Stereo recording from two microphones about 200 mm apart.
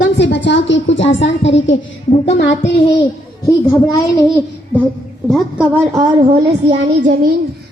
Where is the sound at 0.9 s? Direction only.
70° left (ahead or behind).